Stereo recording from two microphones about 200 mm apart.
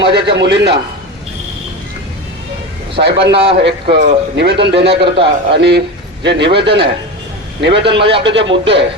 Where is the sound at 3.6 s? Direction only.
55° right (ahead or behind).